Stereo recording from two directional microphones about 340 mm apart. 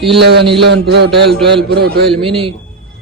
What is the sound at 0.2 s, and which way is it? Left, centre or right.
A man's voice, right.